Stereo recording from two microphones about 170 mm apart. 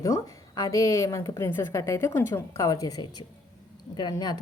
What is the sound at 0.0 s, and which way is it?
A woman's voice, 20° left (ahead or behind).